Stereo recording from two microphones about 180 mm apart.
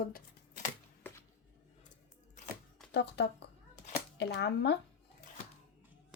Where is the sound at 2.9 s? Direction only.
70° left (ahead or behind).